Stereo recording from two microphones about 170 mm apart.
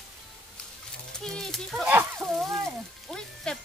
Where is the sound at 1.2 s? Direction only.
Centre (ahead or behind).